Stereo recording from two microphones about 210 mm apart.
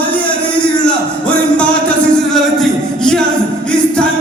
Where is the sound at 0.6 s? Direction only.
5° left (ahead or behind).